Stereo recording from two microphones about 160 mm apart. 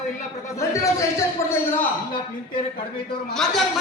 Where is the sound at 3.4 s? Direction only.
Centre (ahead or behind).